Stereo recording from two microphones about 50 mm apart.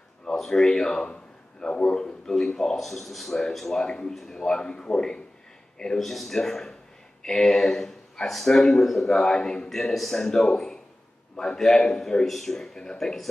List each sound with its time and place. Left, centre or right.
0.4 s a man's voice: centre
5.9 s a man's voice: centre